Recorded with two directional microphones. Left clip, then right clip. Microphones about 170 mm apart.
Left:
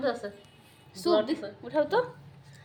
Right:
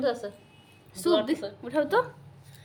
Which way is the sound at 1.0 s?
15° right (ahead or behind).